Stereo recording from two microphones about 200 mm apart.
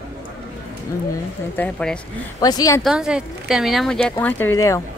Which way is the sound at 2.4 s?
20° left (ahead or behind).